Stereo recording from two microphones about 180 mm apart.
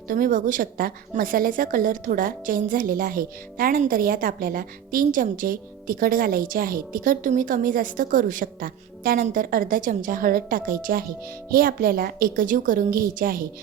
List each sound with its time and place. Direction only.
0.1 s a woman's voice: 50° right (ahead or behind)